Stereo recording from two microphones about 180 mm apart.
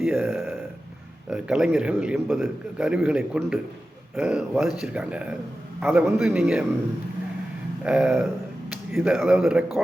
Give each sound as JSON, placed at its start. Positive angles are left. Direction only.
{"t": 0.0, "sound": "speech", "side_deg": -5}
{"t": 7.9, "sound": "speech", "side_deg": -5}